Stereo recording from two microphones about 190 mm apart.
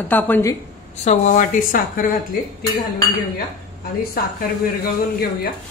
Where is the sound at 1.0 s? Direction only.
40° left (ahead or behind).